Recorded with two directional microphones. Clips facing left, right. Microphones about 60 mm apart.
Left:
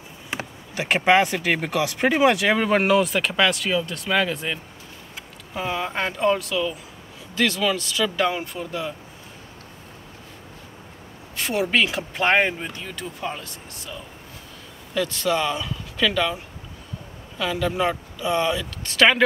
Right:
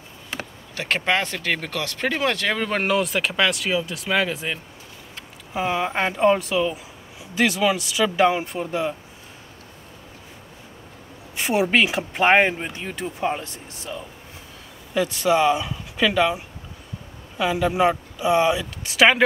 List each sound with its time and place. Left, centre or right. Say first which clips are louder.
0.3 s speech: left 2 dB; centre
11.3 s speech: right 2 dB; centre
15.0 s speech: right 4 dB; centre